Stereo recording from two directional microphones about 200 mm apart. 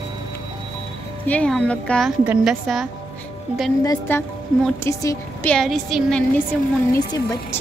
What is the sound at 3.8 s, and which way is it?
Speech, 10° left (ahead or behind).